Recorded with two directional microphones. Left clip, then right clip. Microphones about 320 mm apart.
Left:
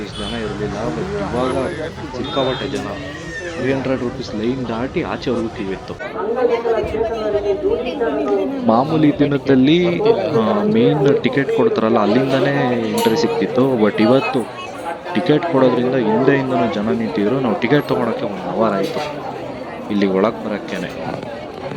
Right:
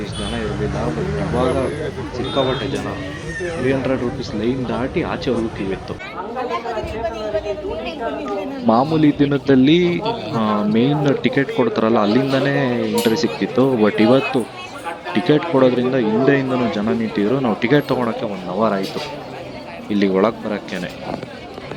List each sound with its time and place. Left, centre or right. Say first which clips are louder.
1.4 s a man's voice: right 2 dB; centre
7.2 s a man's voice: left 4 dB; centre
19.9 s a man's voice: even; centre